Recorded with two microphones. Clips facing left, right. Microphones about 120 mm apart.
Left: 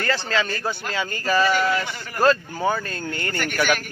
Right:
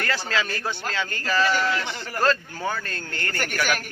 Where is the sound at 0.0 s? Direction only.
Centre (ahead or behind).